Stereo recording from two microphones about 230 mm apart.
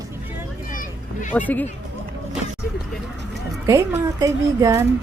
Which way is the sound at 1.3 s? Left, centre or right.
Centre.